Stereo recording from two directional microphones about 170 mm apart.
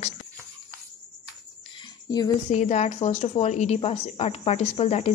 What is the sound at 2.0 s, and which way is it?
Speech, 25° left (ahead or behind).